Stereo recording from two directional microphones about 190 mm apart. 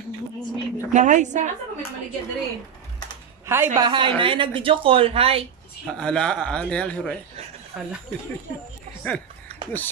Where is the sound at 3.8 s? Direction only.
25° right (ahead or behind).